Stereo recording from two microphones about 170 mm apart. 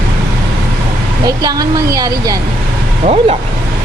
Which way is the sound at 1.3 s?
20° right (ahead or behind).